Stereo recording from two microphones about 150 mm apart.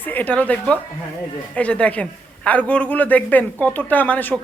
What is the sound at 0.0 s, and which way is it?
A man's voice, 10° left (ahead or behind).